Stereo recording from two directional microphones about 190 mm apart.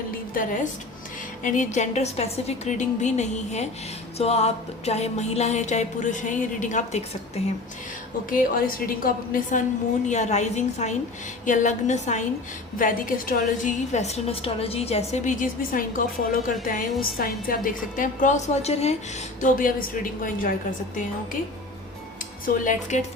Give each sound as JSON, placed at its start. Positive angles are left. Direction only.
{"t": 0.3, "sound": "a woman's voice", "side_deg": 40}
{"t": 8.3, "sound": "a woman's voice", "side_deg": 50}
{"t": 19.4, "sound": "a woman's voice", "side_deg": 45}
{"t": 22.4, "sound": "a woman's voice", "side_deg": 45}